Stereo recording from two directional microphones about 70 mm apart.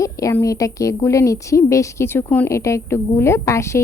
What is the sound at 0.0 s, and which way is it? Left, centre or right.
A woman's voice, left.